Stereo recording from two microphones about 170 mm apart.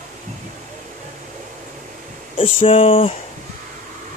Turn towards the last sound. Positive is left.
turn(degrees=35)  # may be behind; listen again after turning